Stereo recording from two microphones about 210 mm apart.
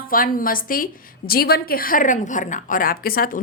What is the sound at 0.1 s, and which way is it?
A woman's voice, 40° left (ahead or behind).